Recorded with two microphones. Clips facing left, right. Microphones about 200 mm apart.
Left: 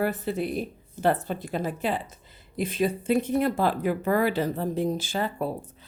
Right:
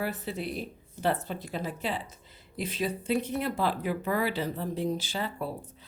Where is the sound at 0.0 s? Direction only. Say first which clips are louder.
Left 6 dB; 50° left (ahead or behind).